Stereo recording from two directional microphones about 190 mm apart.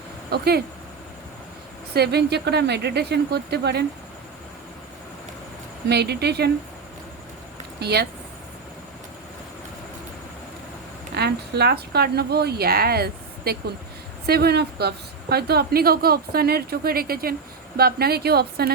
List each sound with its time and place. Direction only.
0.3 s speech: 55° right (ahead or behind)
1.9 s speech: 60° right (ahead or behind)
5.9 s speech: 60° right (ahead or behind)
7.8 s speech: 60° right (ahead or behind)
11.1 s a woman's voice: 60° right (ahead or behind)